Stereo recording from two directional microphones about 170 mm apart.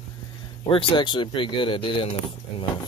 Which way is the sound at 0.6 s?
30° left (ahead or behind).